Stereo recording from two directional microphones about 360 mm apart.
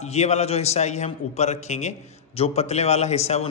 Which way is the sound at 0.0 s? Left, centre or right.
Centre.